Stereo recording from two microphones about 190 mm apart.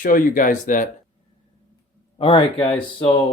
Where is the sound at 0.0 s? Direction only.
45° left (ahead or behind).